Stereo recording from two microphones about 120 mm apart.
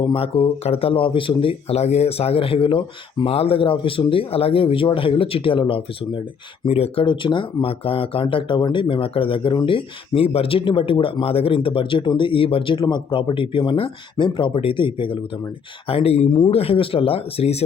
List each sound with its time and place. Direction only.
0.0 s speech: 50° left (ahead or behind)
6.7 s speech: 55° left (ahead or behind)